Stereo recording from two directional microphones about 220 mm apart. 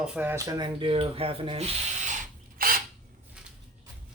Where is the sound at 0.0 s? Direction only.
5° right (ahead or behind); by 1.6 s 25° right (ahead or behind).